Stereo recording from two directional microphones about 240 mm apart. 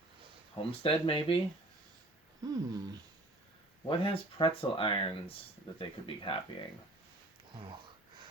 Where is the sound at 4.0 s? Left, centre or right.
Left.